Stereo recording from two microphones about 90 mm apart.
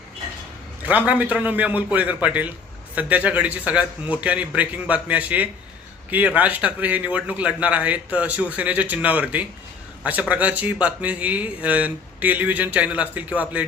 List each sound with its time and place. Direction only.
0.8 s a man's voice: 15° right (ahead or behind)